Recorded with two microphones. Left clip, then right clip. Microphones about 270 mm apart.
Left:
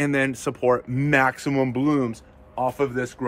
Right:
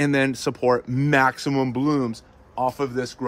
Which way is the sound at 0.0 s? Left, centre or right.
Right.